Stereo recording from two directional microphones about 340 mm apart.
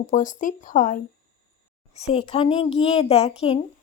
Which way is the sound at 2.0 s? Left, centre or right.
Centre.